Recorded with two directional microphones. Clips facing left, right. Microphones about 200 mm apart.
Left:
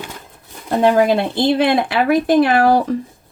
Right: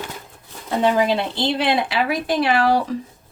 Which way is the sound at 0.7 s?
50° left (ahead or behind).